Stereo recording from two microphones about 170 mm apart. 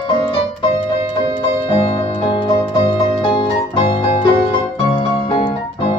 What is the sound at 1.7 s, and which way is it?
Music, 30° left (ahead or behind).